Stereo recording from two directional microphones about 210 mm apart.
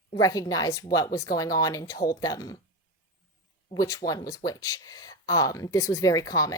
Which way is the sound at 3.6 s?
15° left (ahead or behind).